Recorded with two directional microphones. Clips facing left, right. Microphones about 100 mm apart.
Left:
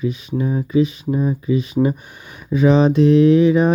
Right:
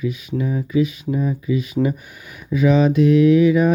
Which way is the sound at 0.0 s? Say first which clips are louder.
Left 2 dB; 30° left (ahead or behind).